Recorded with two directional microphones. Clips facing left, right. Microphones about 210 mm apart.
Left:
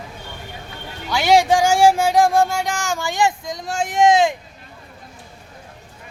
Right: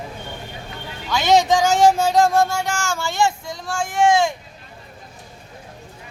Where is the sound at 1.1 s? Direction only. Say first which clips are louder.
Left 1 dB; 10° left (ahead or behind).